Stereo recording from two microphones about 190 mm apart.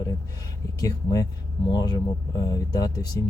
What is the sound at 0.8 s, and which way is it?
Speech, 20° left (ahead or behind).